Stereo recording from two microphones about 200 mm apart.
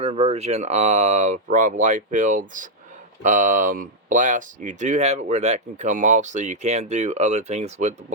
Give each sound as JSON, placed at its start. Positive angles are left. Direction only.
{"t": 0.0, "sound": "speech", "side_deg": -30}